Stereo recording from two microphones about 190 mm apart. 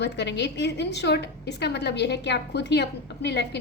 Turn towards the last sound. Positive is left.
turn(degrees=60)  # may be behind; listen again after turning